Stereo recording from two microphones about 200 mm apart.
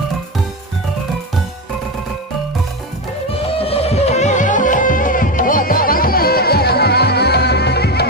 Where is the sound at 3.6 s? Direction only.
30° left (ahead or behind).